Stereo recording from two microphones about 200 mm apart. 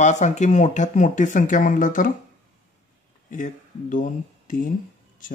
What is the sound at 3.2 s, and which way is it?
A man's voice, 40° left (ahead or behind).